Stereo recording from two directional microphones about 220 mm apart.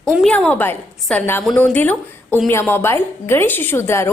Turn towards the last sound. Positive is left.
turn(degrees=10)  # may be behind; listen again after turning